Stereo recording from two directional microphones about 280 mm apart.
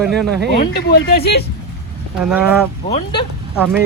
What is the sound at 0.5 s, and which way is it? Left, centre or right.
Speech, left.